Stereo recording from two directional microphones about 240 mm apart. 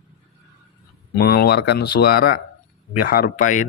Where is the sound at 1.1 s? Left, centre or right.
Left.